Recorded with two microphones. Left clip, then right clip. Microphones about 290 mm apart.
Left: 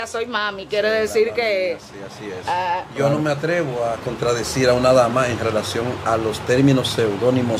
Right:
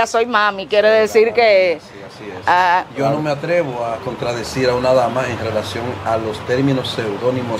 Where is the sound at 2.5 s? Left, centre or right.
Right.